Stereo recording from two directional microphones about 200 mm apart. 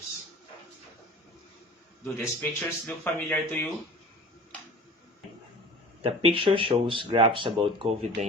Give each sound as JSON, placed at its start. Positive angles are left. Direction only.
{"t": 2.1, "sound": "a man's voice", "side_deg": 10}
{"t": 6.0, "sound": "speech", "side_deg": -25}